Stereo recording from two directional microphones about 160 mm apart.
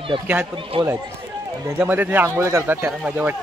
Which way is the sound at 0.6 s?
35° right (ahead or behind).